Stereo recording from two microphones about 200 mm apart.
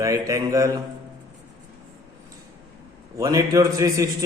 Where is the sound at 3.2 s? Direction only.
15° right (ahead or behind).